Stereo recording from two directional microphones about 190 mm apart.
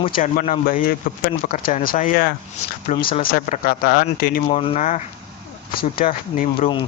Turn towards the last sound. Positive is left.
turn(degrees=25)  # may be behind; listen again after turning